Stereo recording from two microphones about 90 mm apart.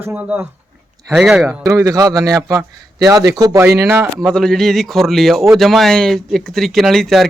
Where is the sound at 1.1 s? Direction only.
5° right (ahead or behind).